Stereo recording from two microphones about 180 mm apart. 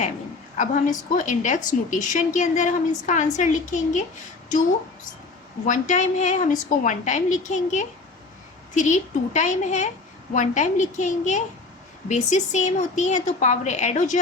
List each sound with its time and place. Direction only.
0.5 s a woman's voice: 45° left (ahead or behind)
5.6 s a woman's voice: 45° left (ahead or behind)